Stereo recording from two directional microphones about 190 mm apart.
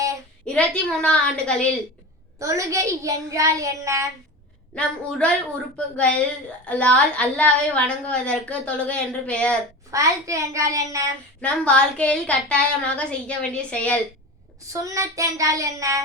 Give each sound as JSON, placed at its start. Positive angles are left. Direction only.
{"t": 0.4, "sound": "speech", "side_deg": 5}
{"t": 2.4, "sound": "a child's voice", "side_deg": -15}
{"t": 4.7, "sound": "a woman's voice", "side_deg": 5}
{"t": 9.9, "sound": "a child's voice", "side_deg": -15}
{"t": 11.3, "sound": "speech", "side_deg": 5}
{"t": 14.7, "sound": "a child's voice", "side_deg": -15}